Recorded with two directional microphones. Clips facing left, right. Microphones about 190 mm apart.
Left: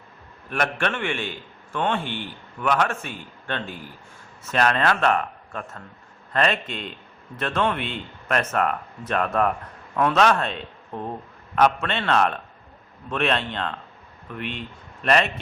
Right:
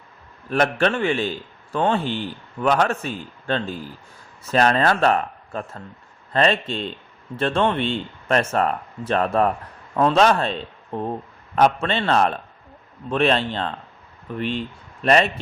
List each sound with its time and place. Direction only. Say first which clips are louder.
0.5 s a man's voice: right 6 dB; 35° right (ahead or behind)